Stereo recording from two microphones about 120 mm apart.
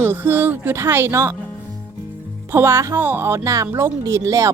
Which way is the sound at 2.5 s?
20° right (ahead or behind).